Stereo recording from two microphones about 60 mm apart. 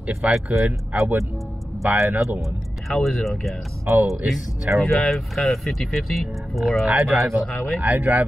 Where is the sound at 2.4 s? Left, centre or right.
Centre.